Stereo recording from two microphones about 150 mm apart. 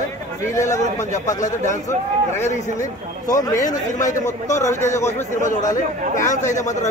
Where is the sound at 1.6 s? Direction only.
20° left (ahead or behind).